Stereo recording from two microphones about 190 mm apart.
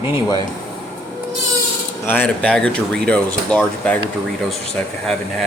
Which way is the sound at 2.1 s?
5° left (ahead or behind).